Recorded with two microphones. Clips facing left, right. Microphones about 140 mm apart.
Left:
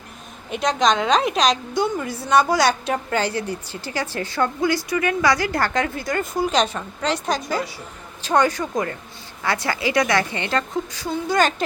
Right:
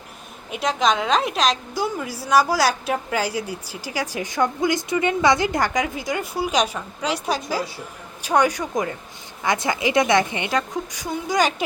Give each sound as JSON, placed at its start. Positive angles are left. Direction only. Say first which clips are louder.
{"t": 0.5, "sound": "a woman's voice", "louder": "left 2 dB", "side_deg": -5}